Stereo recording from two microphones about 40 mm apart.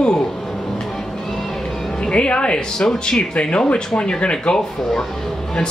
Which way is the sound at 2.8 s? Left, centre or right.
Centre.